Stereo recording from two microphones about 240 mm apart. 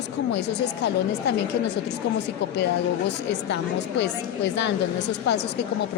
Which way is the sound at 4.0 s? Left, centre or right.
Left.